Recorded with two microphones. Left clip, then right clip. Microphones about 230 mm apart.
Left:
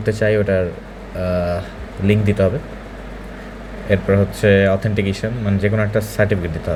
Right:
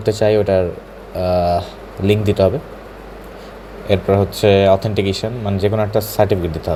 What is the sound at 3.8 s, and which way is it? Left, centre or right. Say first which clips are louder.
Speech: right 2 dB; centre.